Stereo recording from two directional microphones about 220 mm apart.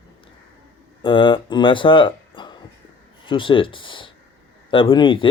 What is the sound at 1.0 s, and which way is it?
A man's voice, 25° left (ahead or behind).